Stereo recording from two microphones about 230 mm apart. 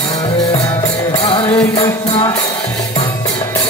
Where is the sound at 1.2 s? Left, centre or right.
Left.